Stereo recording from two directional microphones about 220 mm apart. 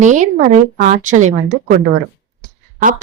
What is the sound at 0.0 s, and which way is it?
A woman's voice, 35° right (ahead or behind).